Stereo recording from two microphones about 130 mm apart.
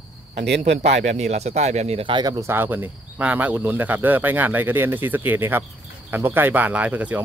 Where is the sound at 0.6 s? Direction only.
60° right (ahead or behind).